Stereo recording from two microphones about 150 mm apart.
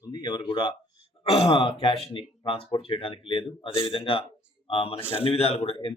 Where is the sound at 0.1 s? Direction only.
30° left (ahead or behind).